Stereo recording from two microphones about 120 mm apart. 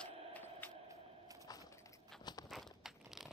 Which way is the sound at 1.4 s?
25° left (ahead or behind).